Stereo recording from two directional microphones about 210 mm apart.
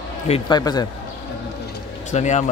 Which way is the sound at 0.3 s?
20° left (ahead or behind).